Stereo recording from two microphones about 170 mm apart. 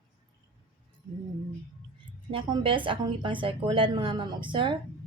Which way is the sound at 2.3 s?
30° right (ahead or behind).